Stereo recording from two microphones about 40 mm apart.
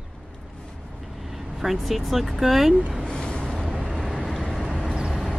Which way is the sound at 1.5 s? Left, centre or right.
Centre.